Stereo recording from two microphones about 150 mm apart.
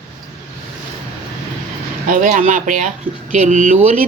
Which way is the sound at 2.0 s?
60° right (ahead or behind).